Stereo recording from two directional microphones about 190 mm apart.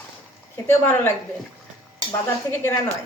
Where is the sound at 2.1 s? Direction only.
10° left (ahead or behind).